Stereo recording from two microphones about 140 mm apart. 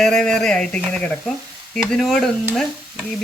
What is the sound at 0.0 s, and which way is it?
Speech, 5° left (ahead or behind).